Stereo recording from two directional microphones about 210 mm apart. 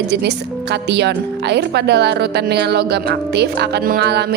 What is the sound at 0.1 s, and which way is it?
A woman's voice, 55° right (ahead or behind).